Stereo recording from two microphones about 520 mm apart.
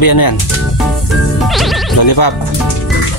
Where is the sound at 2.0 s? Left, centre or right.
Left.